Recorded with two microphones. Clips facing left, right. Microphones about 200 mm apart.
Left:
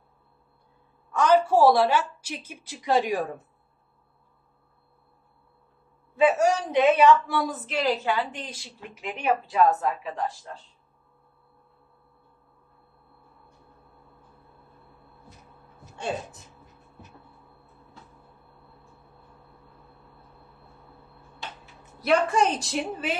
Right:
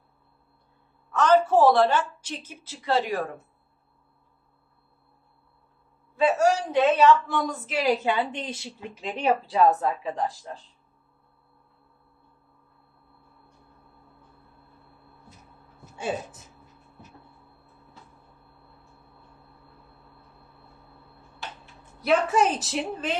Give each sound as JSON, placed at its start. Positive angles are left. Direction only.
{"t": 1.1, "sound": "a woman's voice", "side_deg": 10}
{"t": 6.1, "sound": "a woman's voice", "side_deg": 15}
{"t": 8.0, "sound": "a woman's voice", "side_deg": -20}
{"t": 22.0, "sound": "a woman's voice", "side_deg": 0}